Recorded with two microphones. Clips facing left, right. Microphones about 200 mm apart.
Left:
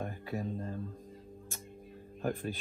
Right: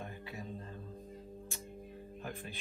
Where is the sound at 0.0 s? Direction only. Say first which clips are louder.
Left 8 dB; 45° left (ahead or behind).